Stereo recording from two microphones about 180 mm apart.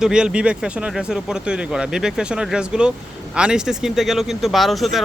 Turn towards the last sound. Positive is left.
turn(degrees=0)  # may be behind; listen again after turning